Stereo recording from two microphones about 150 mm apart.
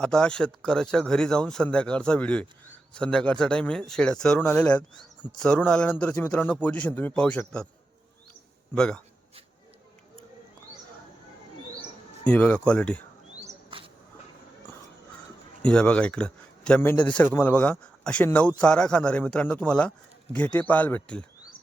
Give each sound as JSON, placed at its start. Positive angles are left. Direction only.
{"t": 0.0, "sound": "speech", "side_deg": 5}
{"t": 8.7, "sound": "speech", "side_deg": 5}
{"t": 12.2, "sound": "speech", "side_deg": 5}
{"t": 13.7, "sound": "a sound", "side_deg": -35}
{"t": 15.6, "sound": "speech", "side_deg": 5}